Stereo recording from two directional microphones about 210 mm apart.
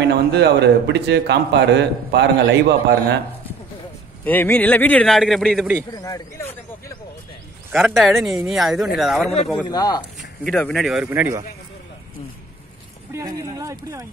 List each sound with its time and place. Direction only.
0.0 s a man's voice: 55° right (ahead or behind)
4.2 s speech: 10° left (ahead or behind)
5.9 s speech: 15° left (ahead or behind)
7.7 s speech: centre (ahead or behind)
9.7 s speech: 20° left (ahead or behind)
10.4 s speech: centre (ahead or behind)
13.1 s speech: 15° right (ahead or behind)